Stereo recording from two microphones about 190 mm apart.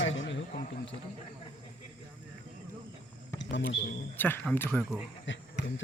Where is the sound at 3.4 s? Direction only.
70° left (ahead or behind).